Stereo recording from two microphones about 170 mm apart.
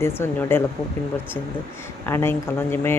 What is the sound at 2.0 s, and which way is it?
Speech, 15° left (ahead or behind).